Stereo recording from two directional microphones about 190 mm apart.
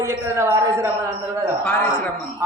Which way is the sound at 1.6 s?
10° left (ahead or behind).